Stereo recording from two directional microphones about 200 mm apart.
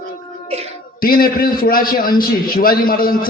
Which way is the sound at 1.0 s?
45° left (ahead or behind).